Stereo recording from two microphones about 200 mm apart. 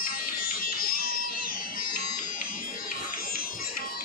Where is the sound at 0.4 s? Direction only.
45° left (ahead or behind).